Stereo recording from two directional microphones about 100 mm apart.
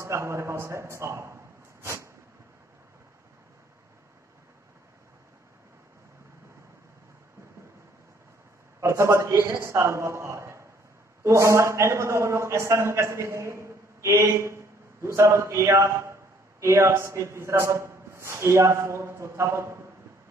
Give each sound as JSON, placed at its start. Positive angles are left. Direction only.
{"t": 0.0, "sound": "a man's voice", "side_deg": -30}
{"t": 8.8, "sound": "a man's voice", "side_deg": -30}